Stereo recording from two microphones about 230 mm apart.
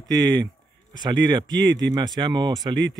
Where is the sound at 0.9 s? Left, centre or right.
Centre.